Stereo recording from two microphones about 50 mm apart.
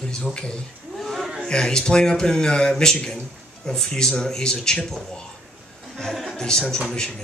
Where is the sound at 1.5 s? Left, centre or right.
Centre.